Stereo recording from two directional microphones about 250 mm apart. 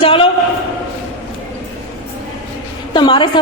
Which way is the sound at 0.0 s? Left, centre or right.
Left.